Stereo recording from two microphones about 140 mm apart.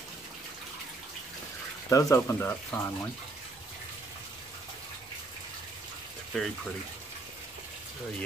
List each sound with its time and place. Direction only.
1.9 s speech: 25° left (ahead or behind)
6.3 s speech: centre (ahead or behind)